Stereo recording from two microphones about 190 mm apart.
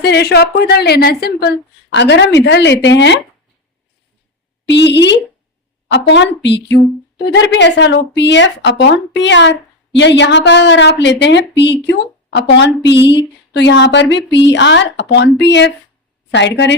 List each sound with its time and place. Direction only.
0.0 s a woman's voice: 60° left (ahead or behind)
4.7 s a woman's voice: 65° left (ahead or behind)